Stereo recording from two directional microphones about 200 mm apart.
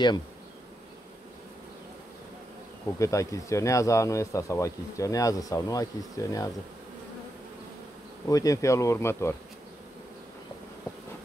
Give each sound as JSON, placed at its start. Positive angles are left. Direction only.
{"t": 3.0, "sound": "speech", "side_deg": 15}
{"t": 8.3, "sound": "speech", "side_deg": 15}